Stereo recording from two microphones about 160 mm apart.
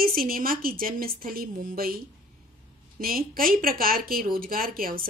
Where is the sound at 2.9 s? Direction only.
65° right (ahead or behind).